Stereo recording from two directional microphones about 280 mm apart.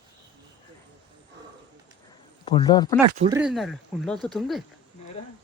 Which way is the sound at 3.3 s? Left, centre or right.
Centre.